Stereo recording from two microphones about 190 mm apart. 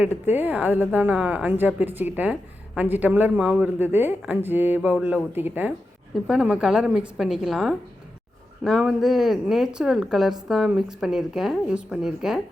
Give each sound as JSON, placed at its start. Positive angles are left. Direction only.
{"t": 0.0, "sound": "a woman's voice", "side_deg": -10}